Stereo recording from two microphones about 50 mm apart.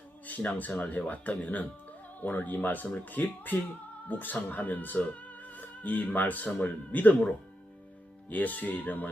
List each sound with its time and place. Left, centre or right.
0.3 s speech: left